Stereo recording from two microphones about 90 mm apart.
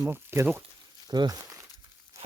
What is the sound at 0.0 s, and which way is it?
Speech, 30° right (ahead or behind).